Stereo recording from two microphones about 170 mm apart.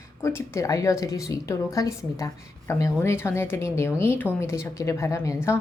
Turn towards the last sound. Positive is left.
turn(degrees=15)  # may be behind; listen again after turning